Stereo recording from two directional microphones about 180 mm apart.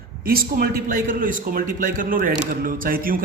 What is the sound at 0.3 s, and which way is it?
A man's voice, 55° right (ahead or behind).